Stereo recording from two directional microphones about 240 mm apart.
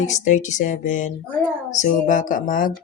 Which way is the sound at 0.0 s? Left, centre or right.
Left.